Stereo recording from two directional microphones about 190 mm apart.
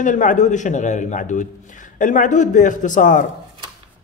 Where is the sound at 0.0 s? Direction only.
45° left (ahead or behind).